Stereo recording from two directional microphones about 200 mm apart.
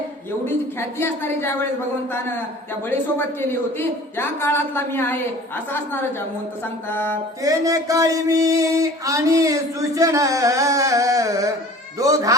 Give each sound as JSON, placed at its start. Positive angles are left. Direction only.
{"t": 0.9, "sound": "a woman's voice", "side_deg": 10}
{"t": 3.2, "sound": "a woman's voice", "side_deg": 10}
{"t": 7.4, "sound": "speech", "side_deg": -15}